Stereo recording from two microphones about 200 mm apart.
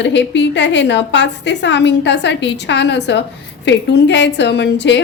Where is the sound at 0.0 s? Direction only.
60° left (ahead or behind).